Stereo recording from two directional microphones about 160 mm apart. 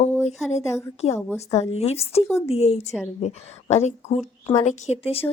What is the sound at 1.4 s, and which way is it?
A woman's voice, 40° left (ahead or behind).